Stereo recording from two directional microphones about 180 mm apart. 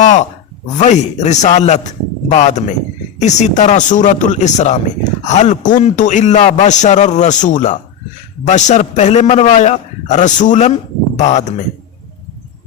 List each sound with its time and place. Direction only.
0.0 s speech: 40° left (ahead or behind)